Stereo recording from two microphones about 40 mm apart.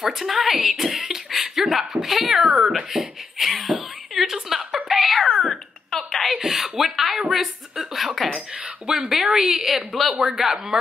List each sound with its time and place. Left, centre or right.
0.0 s speech: centre
2.4 s speech: centre
2.9 s a sound: centre
6.3 s a woman's voice: centre